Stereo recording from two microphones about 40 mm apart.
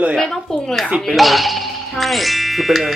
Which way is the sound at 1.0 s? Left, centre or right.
Centre.